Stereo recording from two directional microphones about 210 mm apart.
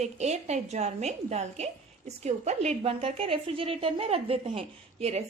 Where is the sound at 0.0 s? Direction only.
30° right (ahead or behind).